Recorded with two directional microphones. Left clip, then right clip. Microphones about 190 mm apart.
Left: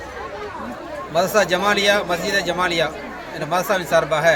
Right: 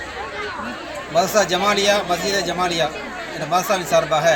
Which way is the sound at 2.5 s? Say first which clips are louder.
Left 1 dB; 5° left (ahead or behind).